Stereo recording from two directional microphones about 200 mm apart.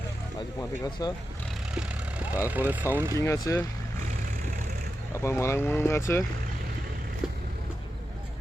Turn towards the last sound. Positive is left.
turn(degrees=-5)  # may be behind; listen again after turning